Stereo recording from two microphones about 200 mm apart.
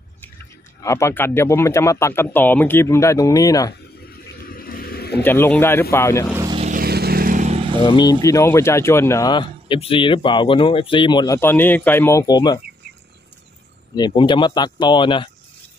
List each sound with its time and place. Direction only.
0.8 s speech: 15° left (ahead or behind)
4.0 s a sound: 50° left (ahead or behind)
5.2 s speech: 10° left (ahead or behind)
6.7 s vehicle: 50° right (ahead or behind); by 7.8 s 30° right (ahead or behind)
7.8 s speech: 20° left (ahead or behind)
13.9 s speech: 20° left (ahead or behind)